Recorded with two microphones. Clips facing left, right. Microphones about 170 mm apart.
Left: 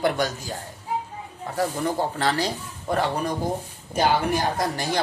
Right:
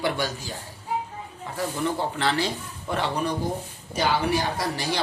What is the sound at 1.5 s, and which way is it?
A woman's voice, 40° left (ahead or behind).